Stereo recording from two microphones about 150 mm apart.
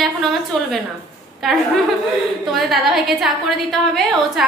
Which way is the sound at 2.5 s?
Centre (ahead or behind).